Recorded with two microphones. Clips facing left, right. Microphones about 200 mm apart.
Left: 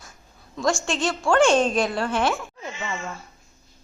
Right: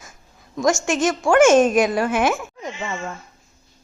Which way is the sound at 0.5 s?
20° right (ahead or behind).